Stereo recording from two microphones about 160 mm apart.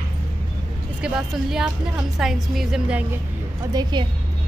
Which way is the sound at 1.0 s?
5° right (ahead or behind).